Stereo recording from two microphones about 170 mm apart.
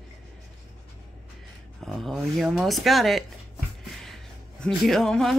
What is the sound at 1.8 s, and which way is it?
Speech, centre (ahead or behind).